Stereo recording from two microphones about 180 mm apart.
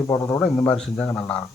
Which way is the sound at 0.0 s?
20° left (ahead or behind).